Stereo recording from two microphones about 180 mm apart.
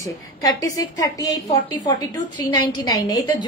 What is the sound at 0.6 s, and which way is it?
A woman's voice, 20° left (ahead or behind).